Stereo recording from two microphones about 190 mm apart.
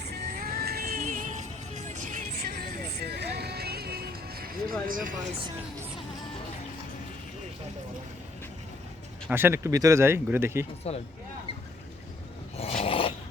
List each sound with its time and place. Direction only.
0.1 s music: 50° right (ahead or behind)
4.9 s speech: 45° right (ahead or behind)
9.3 s speech: 10° right (ahead or behind)
12.5 s roar: 30° left (ahead or behind)